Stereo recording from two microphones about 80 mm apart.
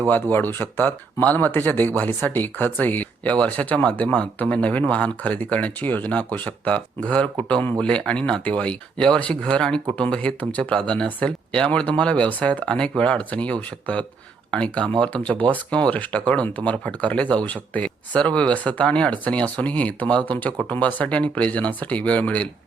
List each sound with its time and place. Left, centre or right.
0.1 s speech: left